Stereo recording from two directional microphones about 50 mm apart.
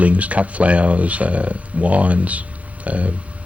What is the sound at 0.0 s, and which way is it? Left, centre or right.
A man's voice, right.